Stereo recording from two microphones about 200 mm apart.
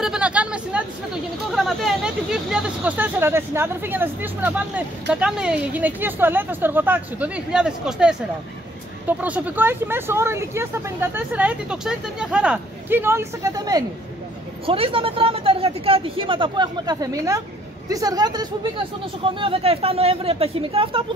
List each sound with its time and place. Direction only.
0.0 s speech: 5° right (ahead or behind); by 21.0 s 25° right (ahead or behind)